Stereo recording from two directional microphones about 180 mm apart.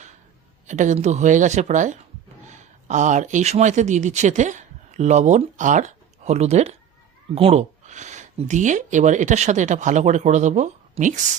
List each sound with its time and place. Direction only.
0.7 s speech: 40° right (ahead or behind)